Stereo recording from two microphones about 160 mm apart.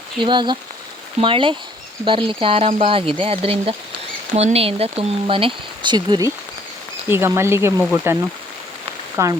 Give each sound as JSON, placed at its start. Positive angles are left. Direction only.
{"t": 0.2, "sound": "speech", "side_deg": -30}